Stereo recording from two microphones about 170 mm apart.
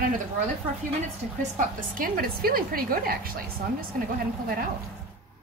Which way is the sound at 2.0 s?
60° right (ahead or behind).